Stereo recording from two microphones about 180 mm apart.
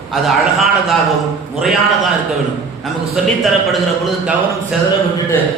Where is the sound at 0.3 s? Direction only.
Centre (ahead or behind).